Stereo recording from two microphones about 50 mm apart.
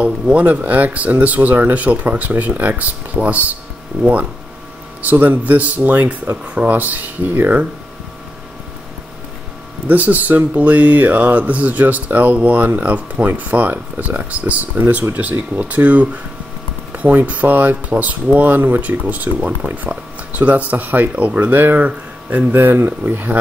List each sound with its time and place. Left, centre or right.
0.0 s speech: right
3.9 s speech: centre
5.0 s speech: right
9.8 s speech: right
16.9 s a sound: right
17.3 s speech: right
22.5 s speech: right